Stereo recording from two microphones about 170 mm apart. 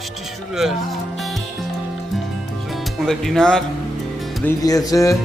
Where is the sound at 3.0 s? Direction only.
Centre (ahead or behind).